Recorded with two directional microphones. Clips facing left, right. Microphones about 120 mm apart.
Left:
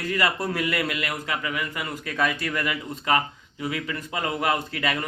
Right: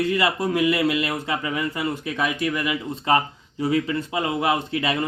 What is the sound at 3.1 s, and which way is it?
Speech, 30° right (ahead or behind).